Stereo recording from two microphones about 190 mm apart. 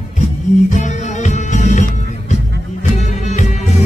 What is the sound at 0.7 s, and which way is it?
Music, 40° left (ahead or behind).